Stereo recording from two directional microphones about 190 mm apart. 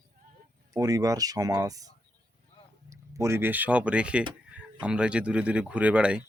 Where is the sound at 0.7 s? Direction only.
20° right (ahead or behind).